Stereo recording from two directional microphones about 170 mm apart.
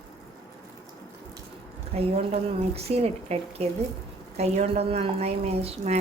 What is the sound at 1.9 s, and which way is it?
Speech, 35° right (ahead or behind).